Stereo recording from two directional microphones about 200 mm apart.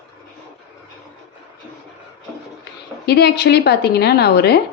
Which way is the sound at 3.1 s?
55° left (ahead or behind).